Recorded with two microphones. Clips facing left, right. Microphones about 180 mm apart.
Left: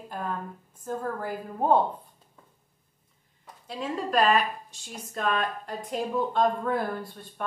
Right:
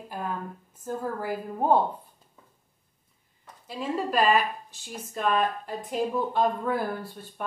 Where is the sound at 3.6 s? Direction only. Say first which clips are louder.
Right 2 dB; 5° right (ahead or behind).